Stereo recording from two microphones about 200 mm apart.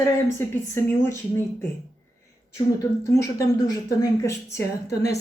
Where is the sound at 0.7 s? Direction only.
10° left (ahead or behind).